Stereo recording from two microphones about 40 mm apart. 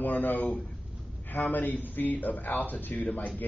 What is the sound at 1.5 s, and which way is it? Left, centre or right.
A man's voice, left.